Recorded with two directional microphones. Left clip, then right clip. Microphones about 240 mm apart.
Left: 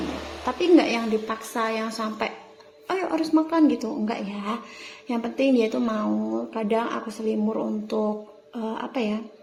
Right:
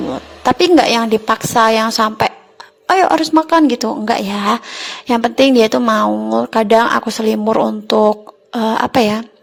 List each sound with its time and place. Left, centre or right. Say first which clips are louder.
0.6 s speech: right 8 dB; right